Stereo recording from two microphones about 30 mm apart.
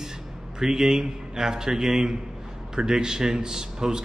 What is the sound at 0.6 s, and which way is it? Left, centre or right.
Speech, centre.